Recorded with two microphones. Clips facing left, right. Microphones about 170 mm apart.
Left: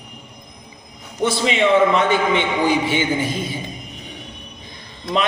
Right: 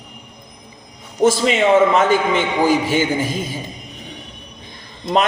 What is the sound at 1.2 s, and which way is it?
A man's voice, 40° right (ahead or behind).